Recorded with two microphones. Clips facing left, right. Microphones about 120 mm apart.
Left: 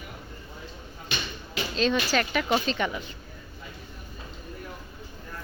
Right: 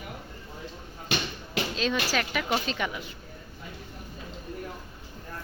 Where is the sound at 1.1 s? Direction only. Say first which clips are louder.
Right 4 dB; 70° right (ahead or behind).